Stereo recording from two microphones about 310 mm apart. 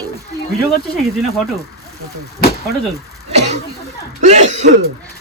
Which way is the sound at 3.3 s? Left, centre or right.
Right.